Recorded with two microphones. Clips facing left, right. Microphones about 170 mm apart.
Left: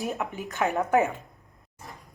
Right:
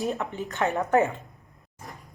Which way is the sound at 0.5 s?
5° left (ahead or behind).